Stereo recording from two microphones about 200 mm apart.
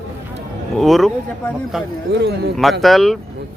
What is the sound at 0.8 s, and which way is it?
Speech, centre (ahead or behind).